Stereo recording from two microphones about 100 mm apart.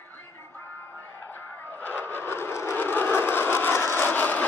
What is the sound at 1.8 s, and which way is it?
Vehicle, 20° left (ahead or behind).